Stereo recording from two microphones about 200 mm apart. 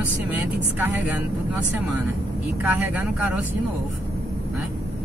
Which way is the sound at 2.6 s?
10° right (ahead or behind).